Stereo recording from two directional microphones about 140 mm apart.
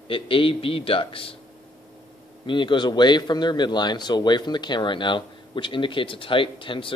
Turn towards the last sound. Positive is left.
turn(degrees=35)  # may be behind; listen again after turning